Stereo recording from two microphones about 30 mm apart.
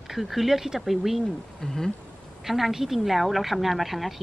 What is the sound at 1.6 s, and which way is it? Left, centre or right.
Speech, centre.